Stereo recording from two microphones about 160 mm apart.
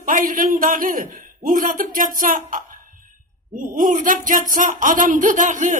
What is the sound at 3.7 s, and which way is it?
Speech, 55° right (ahead or behind).